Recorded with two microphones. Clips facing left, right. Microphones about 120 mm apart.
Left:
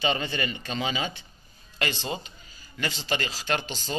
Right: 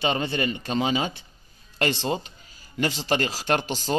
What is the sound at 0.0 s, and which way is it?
A man's voice, 50° right (ahead or behind).